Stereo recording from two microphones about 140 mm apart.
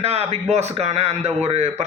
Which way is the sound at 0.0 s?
50° right (ahead or behind).